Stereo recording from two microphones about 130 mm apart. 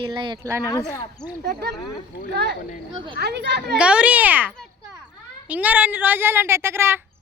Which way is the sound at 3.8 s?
10° right (ahead or behind).